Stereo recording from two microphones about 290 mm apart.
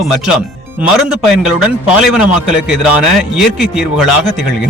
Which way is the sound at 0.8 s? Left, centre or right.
Centre.